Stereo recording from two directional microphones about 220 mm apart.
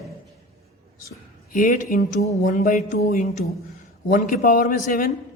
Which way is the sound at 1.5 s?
35° left (ahead or behind).